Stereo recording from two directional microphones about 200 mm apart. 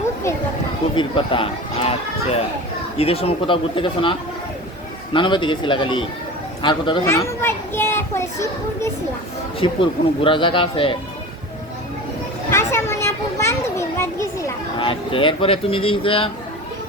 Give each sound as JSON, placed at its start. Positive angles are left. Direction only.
{"t": 0.9, "sound": "speech", "side_deg": 25}
{"t": 5.1, "sound": "speech", "side_deg": 25}
{"t": 7.0, "sound": "a child's voice", "side_deg": 15}
{"t": 9.6, "sound": "speech", "side_deg": 25}
{"t": 12.5, "sound": "children playing", "side_deg": 15}
{"t": 14.8, "sound": "speech", "side_deg": 25}